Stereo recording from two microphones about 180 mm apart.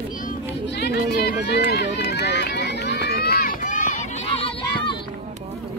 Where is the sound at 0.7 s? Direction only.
70° left (ahead or behind).